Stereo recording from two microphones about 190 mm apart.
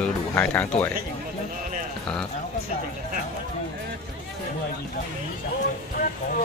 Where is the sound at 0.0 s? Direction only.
10° left (ahead or behind).